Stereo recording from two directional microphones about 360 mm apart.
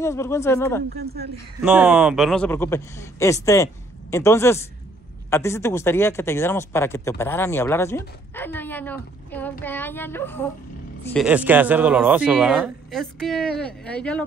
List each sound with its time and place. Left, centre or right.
0.0 s speech: centre
0.8 s speech: right
1.6 s speech: centre